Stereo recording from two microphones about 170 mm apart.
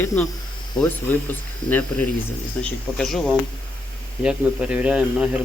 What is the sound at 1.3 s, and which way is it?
Speech, 10° left (ahead or behind).